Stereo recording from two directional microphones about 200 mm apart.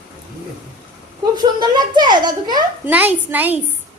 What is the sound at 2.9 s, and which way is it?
Speech, 10° right (ahead or behind).